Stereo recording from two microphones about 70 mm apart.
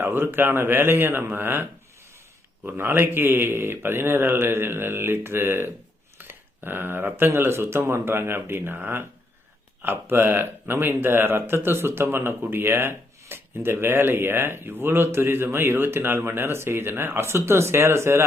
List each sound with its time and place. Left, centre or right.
0.0 s speech: right
2.6 s speech: right